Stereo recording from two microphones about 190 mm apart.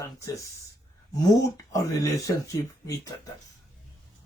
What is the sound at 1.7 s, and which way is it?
Speech, 15° left (ahead or behind).